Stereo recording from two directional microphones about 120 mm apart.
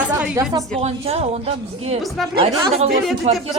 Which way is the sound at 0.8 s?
60° right (ahead or behind).